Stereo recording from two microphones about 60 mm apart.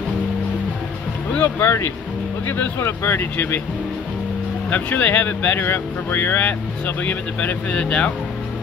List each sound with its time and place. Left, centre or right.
1.6 s speech: left
4.6 s speech: left